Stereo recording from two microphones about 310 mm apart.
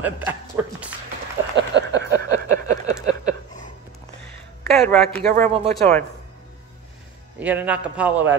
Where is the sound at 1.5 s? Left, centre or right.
Right.